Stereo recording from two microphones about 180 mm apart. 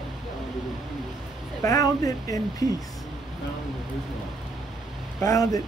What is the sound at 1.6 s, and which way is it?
Speech, 20° left (ahead or behind).